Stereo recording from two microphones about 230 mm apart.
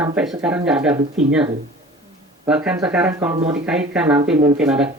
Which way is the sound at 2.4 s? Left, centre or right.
Centre.